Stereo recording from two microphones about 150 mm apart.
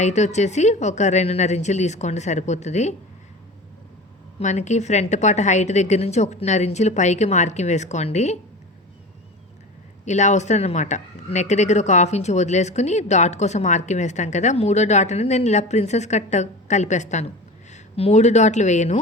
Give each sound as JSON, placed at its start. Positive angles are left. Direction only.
{"t": 0.0, "sound": "speech", "side_deg": 50}
{"t": 4.4, "sound": "speech", "side_deg": 50}
{"t": 10.1, "sound": "speech", "side_deg": 50}